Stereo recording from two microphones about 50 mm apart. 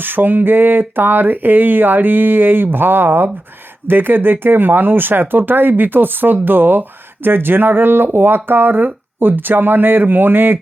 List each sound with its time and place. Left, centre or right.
0.0 s speech: right